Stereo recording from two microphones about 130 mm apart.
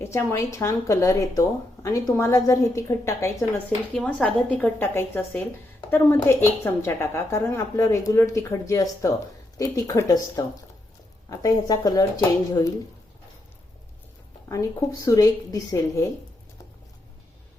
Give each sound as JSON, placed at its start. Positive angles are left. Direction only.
{"t": 0.0, "sound": "speech", "side_deg": 20}
{"t": 3.9, "sound": "a woman's voice", "side_deg": 10}
{"t": 14.5, "sound": "speech", "side_deg": 25}